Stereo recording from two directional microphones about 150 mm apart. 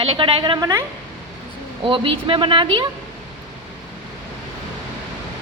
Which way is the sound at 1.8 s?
35° right (ahead or behind).